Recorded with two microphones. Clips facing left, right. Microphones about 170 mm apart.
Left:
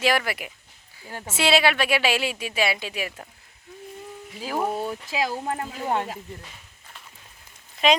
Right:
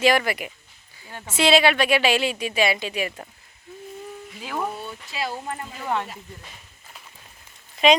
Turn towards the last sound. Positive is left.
turn(degrees=0)  # may be behind; listen again after turning